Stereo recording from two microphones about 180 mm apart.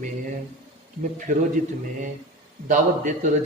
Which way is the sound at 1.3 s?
45° right (ahead or behind).